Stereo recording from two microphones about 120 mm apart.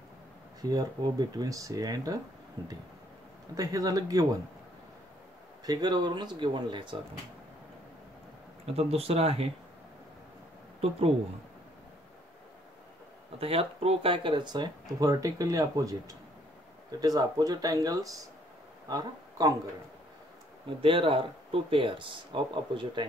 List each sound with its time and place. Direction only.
0.6 s speech: 30° right (ahead or behind)
3.5 s speech: 30° right (ahead or behind)
5.7 s speech: 35° right (ahead or behind)
8.7 s speech: 55° right (ahead or behind)
13.4 s speech: 55° right (ahead or behind); by 19.5 s 30° right (ahead or behind)
20.8 s speech: 50° right (ahead or behind)